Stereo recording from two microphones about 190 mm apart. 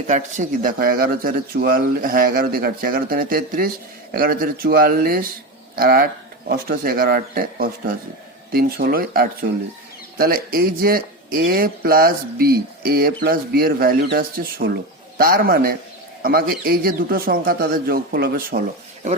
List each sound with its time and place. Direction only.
0.1 s speech: 40° right (ahead or behind)